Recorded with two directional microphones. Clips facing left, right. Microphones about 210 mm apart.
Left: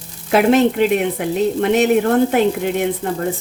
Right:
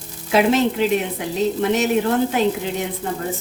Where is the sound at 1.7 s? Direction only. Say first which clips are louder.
Left 7 dB; 60° left (ahead or behind).